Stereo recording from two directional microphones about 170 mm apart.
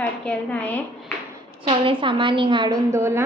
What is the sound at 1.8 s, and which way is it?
A woman's voice, 30° right (ahead or behind).